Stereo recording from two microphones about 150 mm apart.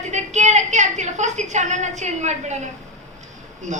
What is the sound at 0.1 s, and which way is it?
A woman's voice, 50° right (ahead or behind).